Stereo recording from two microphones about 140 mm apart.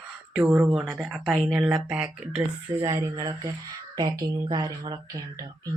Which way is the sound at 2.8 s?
20° right (ahead or behind).